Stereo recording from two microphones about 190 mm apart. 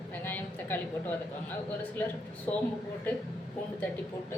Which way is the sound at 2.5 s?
15° left (ahead or behind).